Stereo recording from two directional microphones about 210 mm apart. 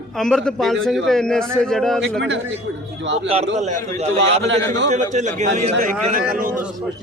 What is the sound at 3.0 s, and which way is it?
Speech, 60° right (ahead or behind).